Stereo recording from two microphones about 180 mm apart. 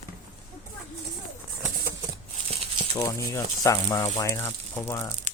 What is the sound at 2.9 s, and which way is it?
Speech, 20° left (ahead or behind).